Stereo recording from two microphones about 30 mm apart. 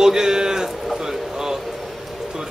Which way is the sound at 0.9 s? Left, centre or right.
Centre.